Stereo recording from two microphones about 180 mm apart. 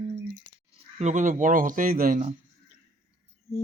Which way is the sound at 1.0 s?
40° right (ahead or behind).